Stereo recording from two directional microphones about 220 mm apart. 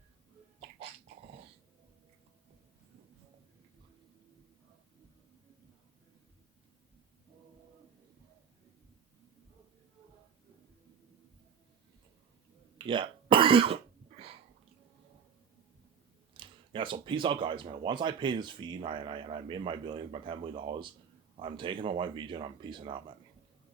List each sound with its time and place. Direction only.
12.8 s cough: 20° right (ahead or behind)
16.3 s speech: 25° right (ahead or behind)